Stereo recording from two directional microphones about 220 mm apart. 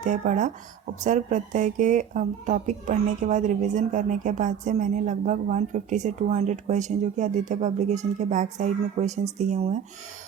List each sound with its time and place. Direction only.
0.0 s a woman's voice: 35° right (ahead or behind)